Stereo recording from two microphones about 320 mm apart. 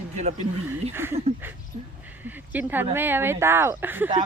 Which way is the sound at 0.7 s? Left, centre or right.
Centre.